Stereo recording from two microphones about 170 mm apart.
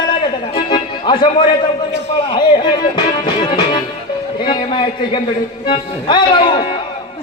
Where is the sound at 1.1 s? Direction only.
25° left (ahead or behind).